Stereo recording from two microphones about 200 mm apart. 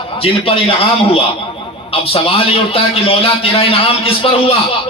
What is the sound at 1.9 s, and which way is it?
A man's voice, 30° left (ahead or behind).